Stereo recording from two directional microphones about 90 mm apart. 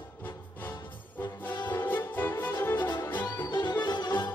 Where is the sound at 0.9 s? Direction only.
20° left (ahead or behind).